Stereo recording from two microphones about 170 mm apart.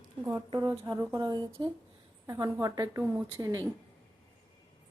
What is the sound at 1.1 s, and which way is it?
A woman's voice, 25° right (ahead or behind).